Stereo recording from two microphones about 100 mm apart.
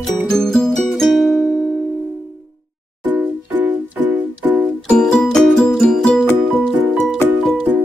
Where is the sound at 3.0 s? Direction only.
20° right (ahead or behind).